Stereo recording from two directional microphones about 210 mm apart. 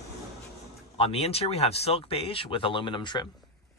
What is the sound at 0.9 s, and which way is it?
Speech, 25° left (ahead or behind).